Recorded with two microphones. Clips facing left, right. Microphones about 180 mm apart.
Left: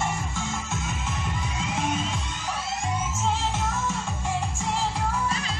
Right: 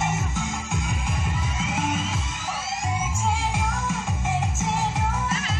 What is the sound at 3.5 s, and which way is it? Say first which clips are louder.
Music: right 1 dB; 15° right (ahead or behind).